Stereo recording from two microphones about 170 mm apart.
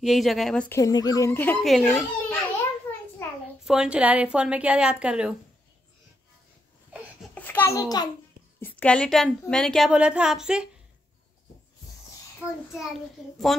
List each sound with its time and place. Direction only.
0.0 s a woman's voice: centre (ahead or behind)
0.7 s speech: 20° left (ahead or behind)
1.6 s a woman's voice: centre (ahead or behind)
3.2 s a sound: 15° left (ahead or behind)
3.6 s a woman's voice: 5° right (ahead or behind)
7.3 s a child's voice: 10° left (ahead or behind)
8.5 s a woman's voice: 10° left (ahead or behind)
12.4 s a woman's voice: centre (ahead or behind)